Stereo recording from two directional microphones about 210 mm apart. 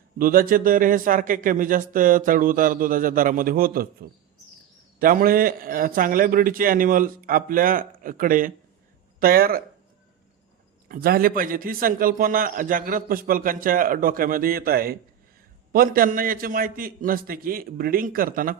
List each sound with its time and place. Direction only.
0.2 s a man's voice: 40° right (ahead or behind)
10.8 s a man's voice: 45° right (ahead or behind)